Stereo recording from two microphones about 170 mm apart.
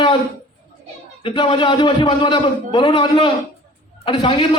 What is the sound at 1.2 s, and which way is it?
A man's voice, 30° left (ahead or behind).